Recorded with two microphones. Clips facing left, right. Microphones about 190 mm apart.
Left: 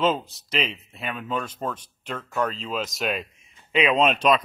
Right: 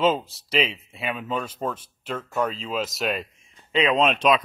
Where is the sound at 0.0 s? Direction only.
5° right (ahead or behind).